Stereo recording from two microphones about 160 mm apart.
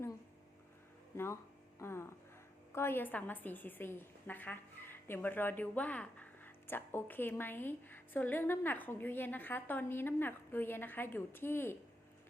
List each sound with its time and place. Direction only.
1.1 s a woman's voice: 15° left (ahead or behind)